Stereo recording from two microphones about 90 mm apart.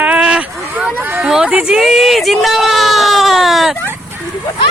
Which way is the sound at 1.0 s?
25° right (ahead or behind).